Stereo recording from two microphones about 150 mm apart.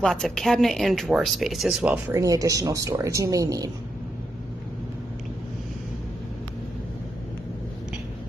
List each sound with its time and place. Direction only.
0.0 s speech: 5° left (ahead or behind)
2.0 s speech: 20° right (ahead or behind)